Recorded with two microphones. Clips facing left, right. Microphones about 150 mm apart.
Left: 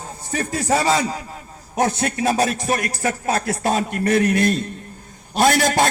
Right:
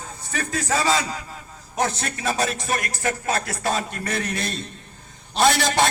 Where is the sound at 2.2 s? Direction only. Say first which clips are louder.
Left 4 dB; 45° left (ahead or behind).